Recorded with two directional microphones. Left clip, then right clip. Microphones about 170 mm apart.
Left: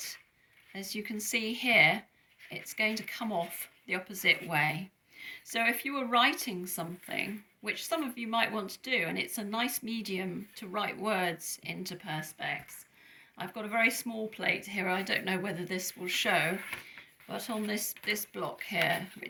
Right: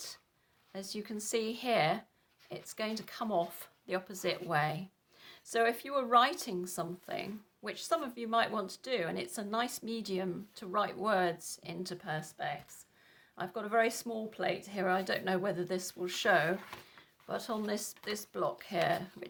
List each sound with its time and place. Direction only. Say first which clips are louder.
0.7 s speech: left 3 dB; 50° right (ahead or behind)